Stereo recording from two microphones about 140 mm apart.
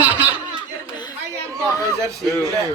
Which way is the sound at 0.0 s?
10° right (ahead or behind).